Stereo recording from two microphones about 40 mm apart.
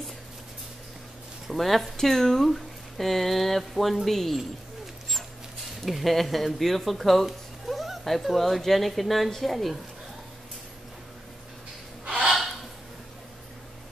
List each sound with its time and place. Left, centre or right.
1.5 s speech: centre
5.9 s speech: centre
12.0 s gasp: right